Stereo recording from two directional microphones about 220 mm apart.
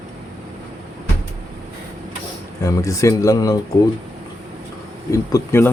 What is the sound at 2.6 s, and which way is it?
Speech, 15° left (ahead or behind).